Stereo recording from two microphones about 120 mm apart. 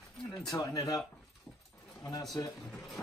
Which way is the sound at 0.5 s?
30° left (ahead or behind).